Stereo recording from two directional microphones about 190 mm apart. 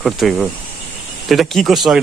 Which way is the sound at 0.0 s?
Centre (ahead or behind).